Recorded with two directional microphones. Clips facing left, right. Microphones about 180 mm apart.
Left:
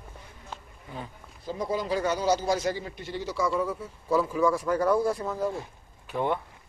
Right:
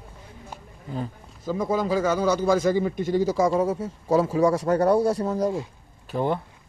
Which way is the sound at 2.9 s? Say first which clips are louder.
Right 11 dB; 45° right (ahead or behind).